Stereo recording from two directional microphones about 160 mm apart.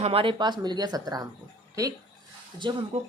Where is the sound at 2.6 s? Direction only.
30° right (ahead or behind).